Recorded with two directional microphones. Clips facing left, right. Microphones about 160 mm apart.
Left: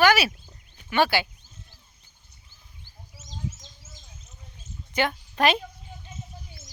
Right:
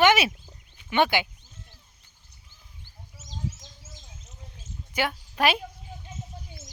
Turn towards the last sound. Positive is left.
turn(degrees=-5)  # may be behind; listen again after turning